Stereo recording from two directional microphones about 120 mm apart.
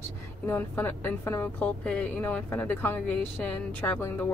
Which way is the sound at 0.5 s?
15° left (ahead or behind).